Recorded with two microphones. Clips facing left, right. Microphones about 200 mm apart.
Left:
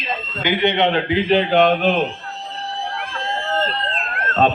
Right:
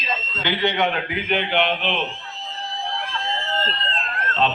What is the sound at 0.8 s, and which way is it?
A man's voice, 25° left (ahead or behind).